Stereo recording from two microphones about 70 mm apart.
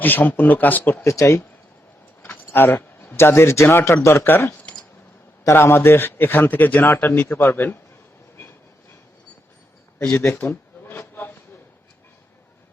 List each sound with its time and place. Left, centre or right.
0.0 s speech: left
1.0 s speech: left
2.2 s speech: left
5.5 s a man's voice: left
10.3 s goat: left